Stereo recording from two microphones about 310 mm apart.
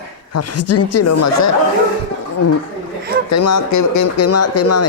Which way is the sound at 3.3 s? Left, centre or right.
Left.